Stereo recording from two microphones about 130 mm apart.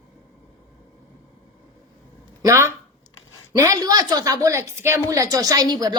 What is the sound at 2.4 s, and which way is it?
A woman's voice, 20° right (ahead or behind).